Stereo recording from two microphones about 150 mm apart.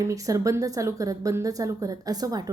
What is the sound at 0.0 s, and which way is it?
A woman's voice, 20° right (ahead or behind).